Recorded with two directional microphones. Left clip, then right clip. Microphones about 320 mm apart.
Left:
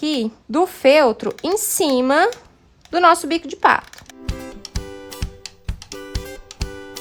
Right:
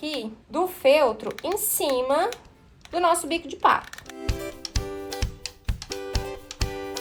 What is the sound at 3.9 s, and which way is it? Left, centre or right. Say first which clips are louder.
Music: even; centre.